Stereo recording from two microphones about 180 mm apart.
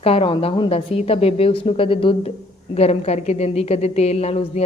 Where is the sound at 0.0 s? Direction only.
30° left (ahead or behind).